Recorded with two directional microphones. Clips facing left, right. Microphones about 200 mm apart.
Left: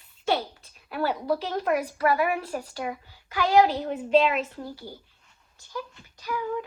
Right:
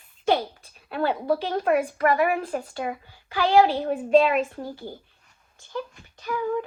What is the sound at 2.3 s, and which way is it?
Child singing, 50° right (ahead or behind).